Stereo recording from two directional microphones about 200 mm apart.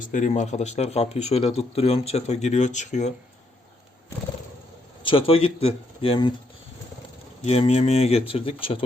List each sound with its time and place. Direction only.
0.0 s speech: 40° left (ahead or behind)
5.0 s speech: 25° left (ahead or behind)
7.4 s speech: 30° left (ahead or behind)